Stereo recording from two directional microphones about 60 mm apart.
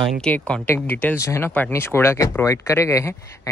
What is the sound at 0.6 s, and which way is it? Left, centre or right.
Speech, left.